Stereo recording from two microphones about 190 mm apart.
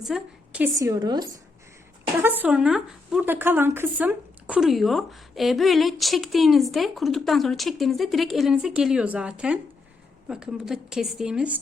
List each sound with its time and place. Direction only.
0.0 s a woman's voice: 5° right (ahead or behind)
0.8 s a woman's voice: 20° right (ahead or behind)
2.2 s speech: 10° right (ahead or behind)